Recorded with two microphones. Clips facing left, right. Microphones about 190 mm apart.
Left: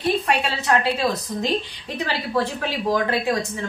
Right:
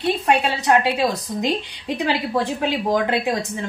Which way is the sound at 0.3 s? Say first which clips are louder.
Right 3 dB; 20° right (ahead or behind).